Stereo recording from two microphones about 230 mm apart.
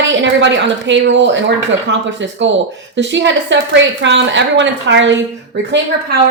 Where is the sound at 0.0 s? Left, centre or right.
Right.